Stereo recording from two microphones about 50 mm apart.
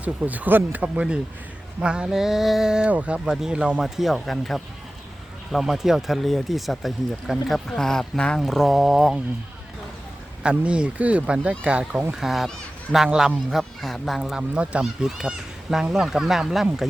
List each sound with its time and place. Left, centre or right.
0.0 s speech: right
1.8 s speech: centre
2.1 s speech: centre
2.9 s speech: right
3.2 s speech: centre
7.7 s speech: centre
8.4 s speech: centre
10.4 s speech: right
12.1 s speech: centre
14.5 s speech: right
15.0 s speech: centre